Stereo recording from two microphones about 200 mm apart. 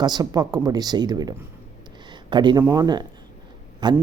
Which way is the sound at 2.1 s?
20° right (ahead or behind).